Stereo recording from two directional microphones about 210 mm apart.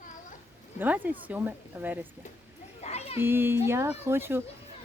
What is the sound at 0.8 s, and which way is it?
Speech, 10° right (ahead or behind).